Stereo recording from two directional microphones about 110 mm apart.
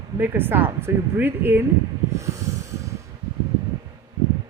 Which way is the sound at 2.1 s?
30° right (ahead or behind).